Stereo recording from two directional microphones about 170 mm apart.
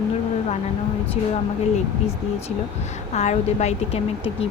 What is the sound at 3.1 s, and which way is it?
Speech, 40° left (ahead or behind).